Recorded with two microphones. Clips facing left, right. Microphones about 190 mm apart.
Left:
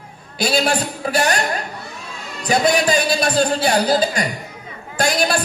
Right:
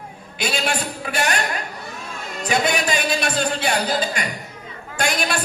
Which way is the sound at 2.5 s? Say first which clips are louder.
Left 5 dB; 35° left (ahead or behind).